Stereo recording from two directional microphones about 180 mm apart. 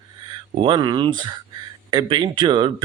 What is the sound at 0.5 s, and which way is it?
Speech, 25° right (ahead or behind).